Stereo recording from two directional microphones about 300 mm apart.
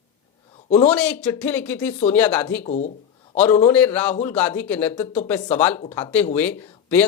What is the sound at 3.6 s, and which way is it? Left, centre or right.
Speech, centre.